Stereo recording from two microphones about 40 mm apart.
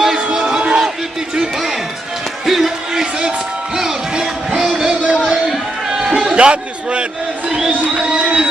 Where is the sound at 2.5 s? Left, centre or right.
Centre.